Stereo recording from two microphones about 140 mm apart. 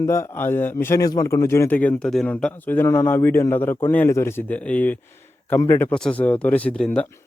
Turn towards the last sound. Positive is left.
turn(degrees=10)  # may be behind; listen again after turning